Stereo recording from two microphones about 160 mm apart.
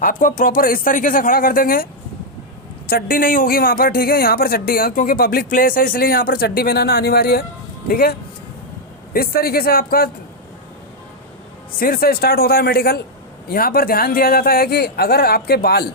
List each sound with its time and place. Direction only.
0.0 s speech: 60° left (ahead or behind)
2.9 s speech: 60° left (ahead or behind)
9.1 s speech: 70° left (ahead or behind)
11.8 s speech: 65° left (ahead or behind)